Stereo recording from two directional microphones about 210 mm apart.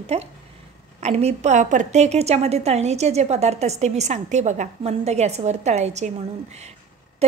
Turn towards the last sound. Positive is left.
turn(degrees=-30)  # may be behind; listen again after turning